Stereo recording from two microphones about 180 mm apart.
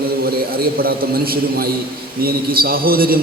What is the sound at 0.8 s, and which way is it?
A man's voice, 55° right (ahead or behind).